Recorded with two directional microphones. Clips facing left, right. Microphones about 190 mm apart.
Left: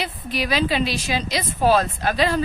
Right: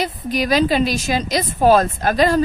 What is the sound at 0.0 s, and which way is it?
A woman's voice, 45° right (ahead or behind).